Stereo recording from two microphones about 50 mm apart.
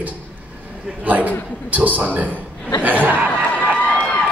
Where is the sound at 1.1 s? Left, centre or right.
Right.